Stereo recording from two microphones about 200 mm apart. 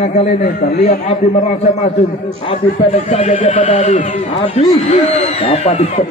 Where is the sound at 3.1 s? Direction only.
25° left (ahead or behind).